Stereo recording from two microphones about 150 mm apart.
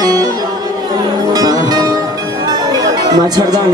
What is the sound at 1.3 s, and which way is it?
Music, 25° right (ahead or behind).